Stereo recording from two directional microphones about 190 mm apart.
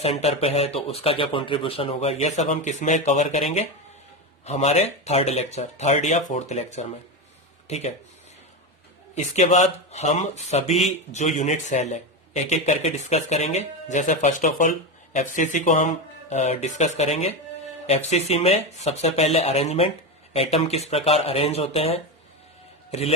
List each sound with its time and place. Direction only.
0.0 s speech: 35° left (ahead or behind)
9.1 s a man's voice: 35° left (ahead or behind)